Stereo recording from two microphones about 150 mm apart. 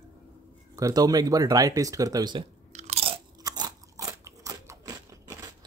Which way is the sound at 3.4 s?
25° right (ahead or behind).